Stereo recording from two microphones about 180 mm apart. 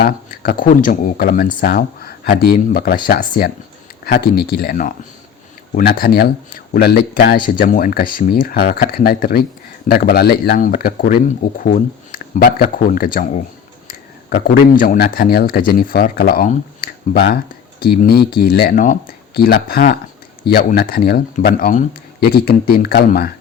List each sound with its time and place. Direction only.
0.0 s speech: 60° left (ahead or behind)